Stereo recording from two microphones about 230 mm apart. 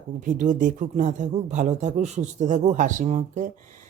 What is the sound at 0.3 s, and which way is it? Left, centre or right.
Speech, right.